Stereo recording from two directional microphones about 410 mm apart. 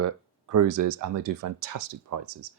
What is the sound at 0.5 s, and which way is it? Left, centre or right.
Speech, right.